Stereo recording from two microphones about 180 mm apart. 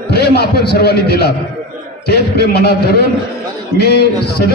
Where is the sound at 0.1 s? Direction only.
60° left (ahead or behind).